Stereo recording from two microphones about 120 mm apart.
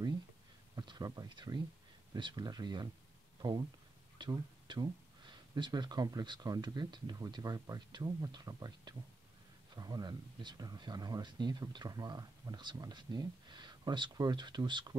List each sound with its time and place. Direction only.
0.7 s speech: 35° right (ahead or behind)
4.2 s speech: 35° right (ahead or behind)